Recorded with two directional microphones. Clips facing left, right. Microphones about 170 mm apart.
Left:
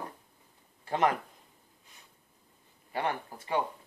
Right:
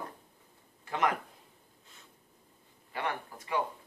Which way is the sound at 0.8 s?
30° left (ahead or behind).